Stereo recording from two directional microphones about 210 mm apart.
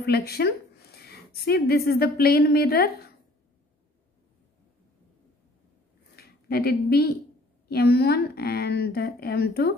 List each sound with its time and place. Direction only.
0.0 s a woman's voice: 50° left (ahead or behind)
6.1 s a sound: 50° left (ahead or behind)
7.7 s a woman's voice: 50° left (ahead or behind)